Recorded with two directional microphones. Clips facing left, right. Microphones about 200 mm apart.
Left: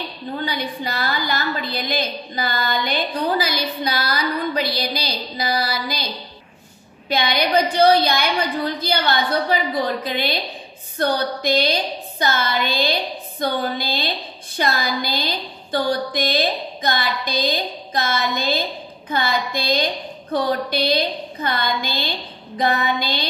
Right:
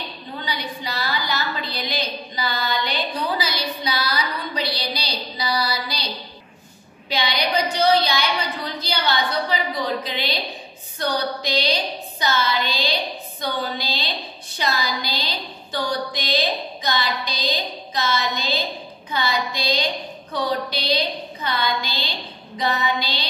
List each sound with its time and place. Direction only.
0.5 s a woman's voice: 55° left (ahead or behind)
7.1 s a woman's voice: 55° left (ahead or behind)